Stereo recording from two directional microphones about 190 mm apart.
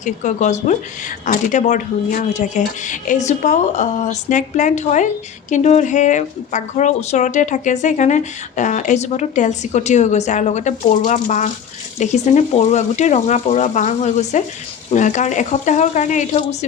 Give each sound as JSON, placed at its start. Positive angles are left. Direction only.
{"t": 0.0, "sound": "a woman's voice", "side_deg": 40}